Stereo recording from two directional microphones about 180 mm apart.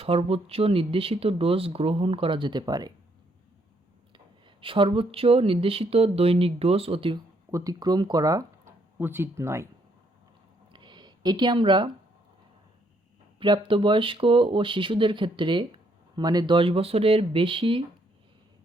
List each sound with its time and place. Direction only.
0.0 s speech: 30° right (ahead or behind)
4.6 s speech: 30° right (ahead or behind)
7.5 s speech: 20° right (ahead or behind)
10.7 s a sound: 25° right (ahead or behind)
13.4 s speech: 25° right (ahead or behind)